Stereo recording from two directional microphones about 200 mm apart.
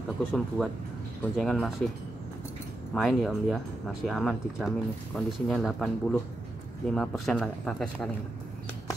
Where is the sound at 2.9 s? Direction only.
Centre (ahead or behind).